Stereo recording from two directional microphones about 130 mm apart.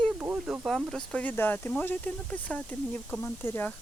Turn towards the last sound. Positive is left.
turn(degrees=20)  # may be behind; listen again after turning